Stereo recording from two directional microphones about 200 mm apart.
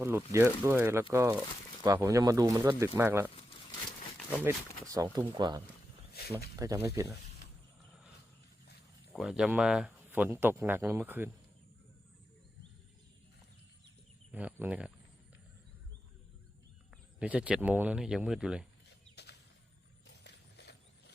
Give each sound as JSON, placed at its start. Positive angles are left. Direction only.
{"t": 0.0, "sound": "speech", "side_deg": -15}
{"t": 4.9, "sound": "speech", "side_deg": -20}
{"t": 9.1, "sound": "speech", "side_deg": 0}
{"t": 14.3, "sound": "speech", "side_deg": -5}
{"t": 17.2, "sound": "speech", "side_deg": -5}
{"t": 19.1, "sound": "a sound", "side_deg": 55}